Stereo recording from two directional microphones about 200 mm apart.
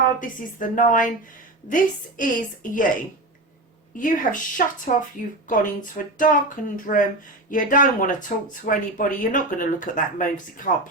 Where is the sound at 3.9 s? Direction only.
40° left (ahead or behind).